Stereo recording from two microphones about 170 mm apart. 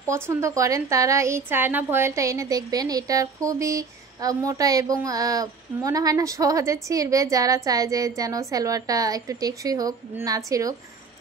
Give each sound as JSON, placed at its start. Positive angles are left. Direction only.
{"t": 0.0, "sound": "a woman's voice", "side_deg": -15}